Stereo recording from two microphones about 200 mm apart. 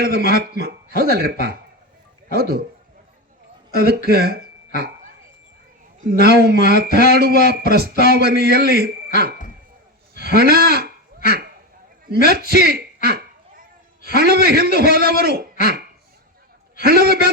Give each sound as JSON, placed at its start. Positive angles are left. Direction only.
{"t": 0.0, "sound": "speech", "side_deg": -50}
{"t": 3.8, "sound": "speech", "side_deg": -50}
{"t": 6.1, "sound": "speech", "side_deg": -50}
{"t": 10.2, "sound": "speech", "side_deg": -50}
{"t": 16.8, "sound": "speech", "side_deg": -50}